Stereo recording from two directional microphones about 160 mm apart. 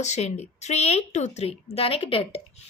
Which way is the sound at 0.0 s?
45° left (ahead or behind).